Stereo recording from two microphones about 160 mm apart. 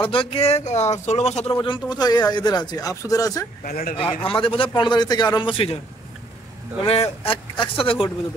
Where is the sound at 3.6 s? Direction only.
70° left (ahead or behind).